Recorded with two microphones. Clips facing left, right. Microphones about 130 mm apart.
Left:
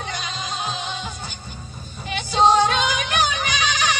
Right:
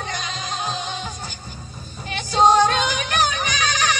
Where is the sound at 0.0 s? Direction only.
40° right (ahead or behind).